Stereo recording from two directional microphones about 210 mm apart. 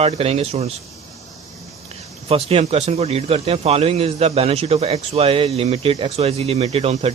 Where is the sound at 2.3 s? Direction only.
30° right (ahead or behind).